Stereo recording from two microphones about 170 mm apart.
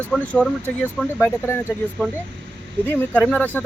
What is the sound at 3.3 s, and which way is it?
Speech, 10° left (ahead or behind).